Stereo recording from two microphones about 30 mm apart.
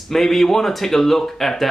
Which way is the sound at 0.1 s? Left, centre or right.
Centre.